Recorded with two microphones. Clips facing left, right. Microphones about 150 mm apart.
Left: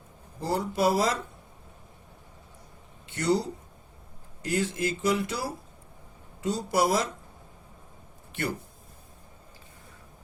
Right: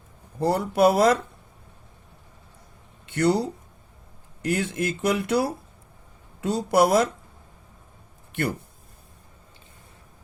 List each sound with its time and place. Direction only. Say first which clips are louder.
0.3 s speech: right 6 dB; 60° right (ahead or behind)
3.1 s speech: right 5 dB; 60° right (ahead or behind)
4.4 s speech: right 3 dB; 60° right (ahead or behind)